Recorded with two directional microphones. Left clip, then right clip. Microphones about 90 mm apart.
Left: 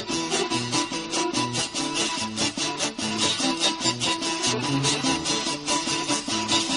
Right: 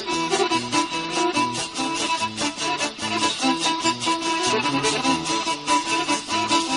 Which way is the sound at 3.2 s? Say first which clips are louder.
Right 1 dB; 30° right (ahead or behind).